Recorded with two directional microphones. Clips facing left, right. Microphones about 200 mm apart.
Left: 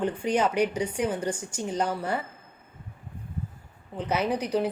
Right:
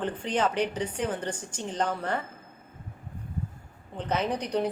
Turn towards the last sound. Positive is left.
turn(degrees=5)  # may be behind; listen again after turning